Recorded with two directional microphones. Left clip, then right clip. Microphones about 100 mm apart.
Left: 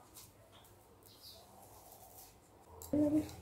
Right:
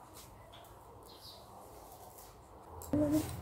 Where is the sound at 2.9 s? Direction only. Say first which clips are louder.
Right 1 dB; 5° left (ahead or behind).